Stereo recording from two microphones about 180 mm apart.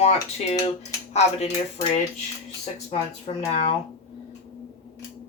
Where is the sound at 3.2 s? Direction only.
40° left (ahead or behind).